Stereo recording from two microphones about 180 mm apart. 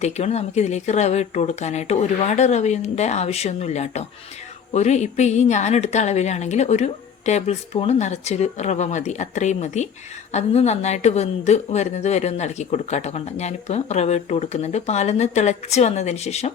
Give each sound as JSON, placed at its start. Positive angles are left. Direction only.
{"t": 0.0, "sound": "a woman's voice", "side_deg": 35}